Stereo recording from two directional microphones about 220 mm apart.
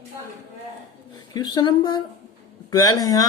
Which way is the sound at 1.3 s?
20° left (ahead or behind).